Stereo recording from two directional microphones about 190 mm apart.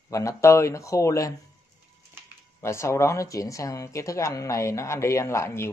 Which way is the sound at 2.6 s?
15° left (ahead or behind).